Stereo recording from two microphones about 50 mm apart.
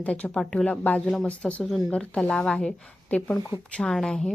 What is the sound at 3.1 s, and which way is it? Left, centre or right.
Speech, left.